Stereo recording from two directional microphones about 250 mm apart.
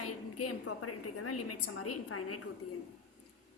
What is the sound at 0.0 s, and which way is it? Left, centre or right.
A woman's voice, left.